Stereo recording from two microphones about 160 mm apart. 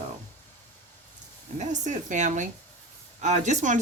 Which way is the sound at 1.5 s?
50° right (ahead or behind).